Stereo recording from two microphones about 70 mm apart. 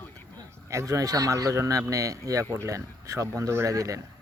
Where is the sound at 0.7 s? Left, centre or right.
Right.